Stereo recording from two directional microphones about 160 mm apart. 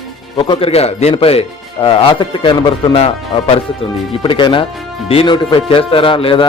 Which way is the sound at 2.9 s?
40° left (ahead or behind).